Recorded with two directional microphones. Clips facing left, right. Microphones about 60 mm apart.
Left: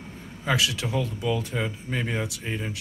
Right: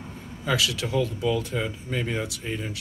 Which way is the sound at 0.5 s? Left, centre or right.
Left.